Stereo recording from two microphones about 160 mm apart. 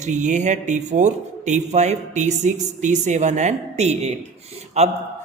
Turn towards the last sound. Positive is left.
turn(degrees=-45)  # may be behind; listen again after turning